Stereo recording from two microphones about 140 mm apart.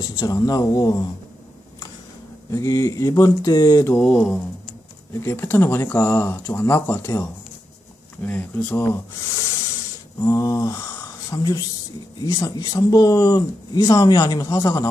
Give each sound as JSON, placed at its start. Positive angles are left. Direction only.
{"t": 0.0, "sound": "speech", "side_deg": 25}
{"t": 2.5, "sound": "speech", "side_deg": 20}
{"t": 4.0, "sound": "speech", "side_deg": 5}
{"t": 5.2, "sound": "speech", "side_deg": 20}
{"t": 8.3, "sound": "speech", "side_deg": 10}
{"t": 10.2, "sound": "speech", "side_deg": 25}